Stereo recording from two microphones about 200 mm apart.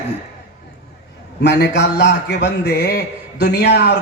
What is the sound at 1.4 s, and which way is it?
A man's voice, 60° left (ahead or behind).